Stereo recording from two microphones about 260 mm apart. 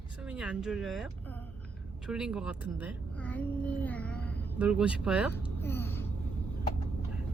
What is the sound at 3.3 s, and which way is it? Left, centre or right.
Child singing, centre.